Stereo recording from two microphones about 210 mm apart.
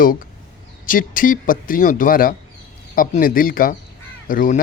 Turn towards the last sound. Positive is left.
turn(degrees=40)  # may be behind; listen again after turning